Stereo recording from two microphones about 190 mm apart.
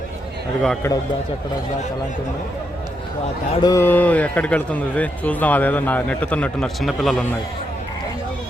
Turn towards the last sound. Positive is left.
turn(degrees=0)  # may be behind; listen again after turning